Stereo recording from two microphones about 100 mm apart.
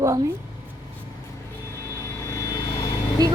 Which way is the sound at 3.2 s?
40° right (ahead or behind).